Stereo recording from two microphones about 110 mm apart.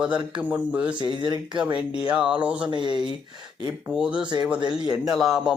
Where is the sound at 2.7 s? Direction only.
45° right (ahead or behind).